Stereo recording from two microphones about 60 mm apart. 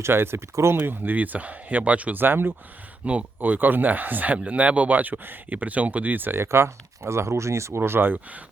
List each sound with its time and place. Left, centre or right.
0.0 s speech: right
0.8 s speech: right
3.1 s speech: right
7.8 s speech: right